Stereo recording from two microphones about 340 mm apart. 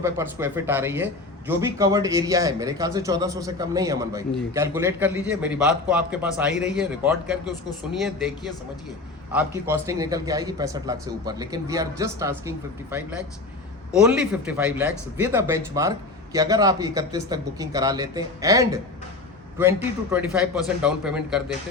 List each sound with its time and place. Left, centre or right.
0.0 s a man's voice: centre
9.3 s a man's voice: centre